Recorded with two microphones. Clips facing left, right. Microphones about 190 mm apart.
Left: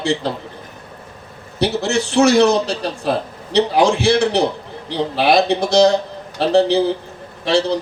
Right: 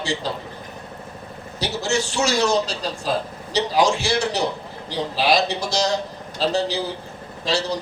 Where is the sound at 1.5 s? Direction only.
60° left (ahead or behind).